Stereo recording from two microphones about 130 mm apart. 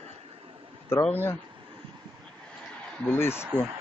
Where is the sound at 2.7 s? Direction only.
15° left (ahead or behind).